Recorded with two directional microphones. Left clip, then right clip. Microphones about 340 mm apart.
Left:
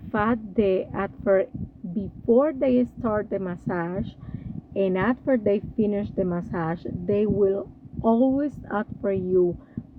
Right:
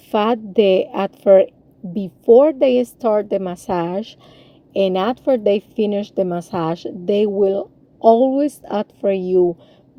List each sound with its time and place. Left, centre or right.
0.1 s a woman's voice: centre